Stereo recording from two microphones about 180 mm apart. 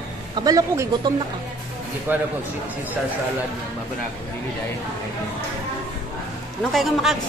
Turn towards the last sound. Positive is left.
turn(degrees=0)  # may be behind; listen again after turning